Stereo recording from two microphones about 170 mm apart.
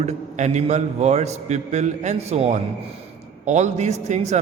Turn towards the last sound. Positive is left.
turn(degrees=-40)  # may be behind; listen again after turning